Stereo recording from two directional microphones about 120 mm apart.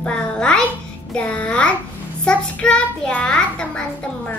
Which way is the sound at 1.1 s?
10° left (ahead or behind).